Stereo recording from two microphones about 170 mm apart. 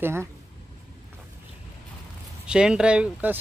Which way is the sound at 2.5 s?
5° right (ahead or behind).